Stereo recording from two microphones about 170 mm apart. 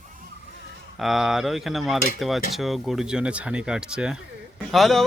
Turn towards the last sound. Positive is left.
turn(degrees=0)  # may be behind; listen again after turning